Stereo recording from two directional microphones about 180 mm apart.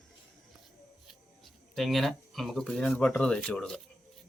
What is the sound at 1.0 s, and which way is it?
Speech, centre (ahead or behind).